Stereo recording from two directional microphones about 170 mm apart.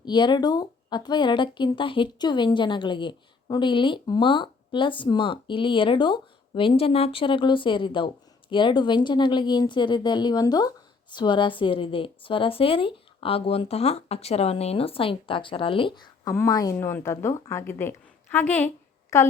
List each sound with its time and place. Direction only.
0.0 s a woman's voice: 25° left (ahead or behind)